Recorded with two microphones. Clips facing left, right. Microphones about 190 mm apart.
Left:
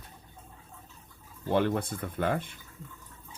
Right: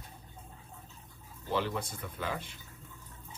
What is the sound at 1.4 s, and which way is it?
Speech, 55° left (ahead or behind).